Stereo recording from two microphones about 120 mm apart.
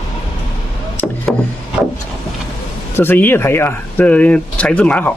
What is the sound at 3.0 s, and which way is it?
Speech, 15° left (ahead or behind).